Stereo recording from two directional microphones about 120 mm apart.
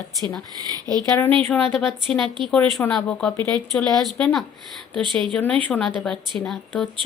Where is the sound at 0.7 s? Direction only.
30° right (ahead or behind).